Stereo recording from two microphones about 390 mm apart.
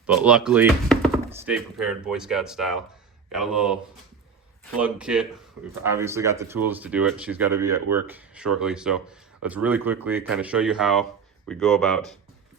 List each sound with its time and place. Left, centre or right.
0.0 s speech: centre
4.8 s speech: centre